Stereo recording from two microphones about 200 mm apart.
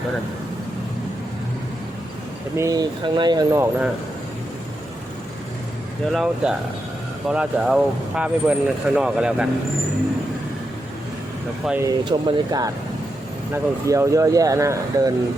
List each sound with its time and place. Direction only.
2.6 s speech: 20° right (ahead or behind)
6.1 s speech: 5° right (ahead or behind)
11.6 s speech: 5° right (ahead or behind)
11.9 s speech: 20° right (ahead or behind)